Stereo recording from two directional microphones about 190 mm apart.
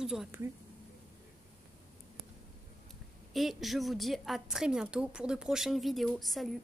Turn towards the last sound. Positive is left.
turn(degrees=0)  # may be behind; listen again after turning